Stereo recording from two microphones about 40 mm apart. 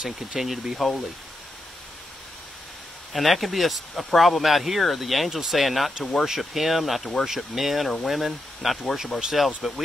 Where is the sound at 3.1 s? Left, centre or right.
Centre.